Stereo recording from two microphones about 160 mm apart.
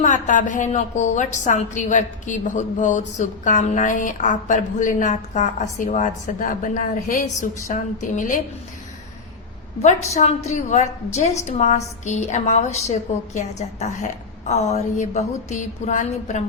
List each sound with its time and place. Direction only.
0.0 s a woman's voice: 50° left (ahead or behind)
9.8 s a woman's voice: 45° left (ahead or behind)